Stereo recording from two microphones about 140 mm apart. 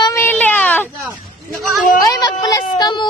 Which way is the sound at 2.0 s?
25° left (ahead or behind).